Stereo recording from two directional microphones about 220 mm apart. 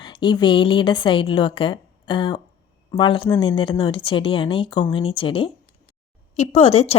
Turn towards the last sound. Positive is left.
turn(degrees=30)  # may be behind; listen again after turning